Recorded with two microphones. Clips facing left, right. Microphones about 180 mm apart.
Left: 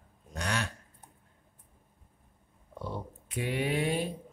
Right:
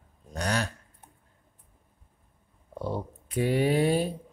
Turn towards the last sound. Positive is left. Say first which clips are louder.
# right 6 dB
turn(degrees=-40)  # may be behind; listen again after turning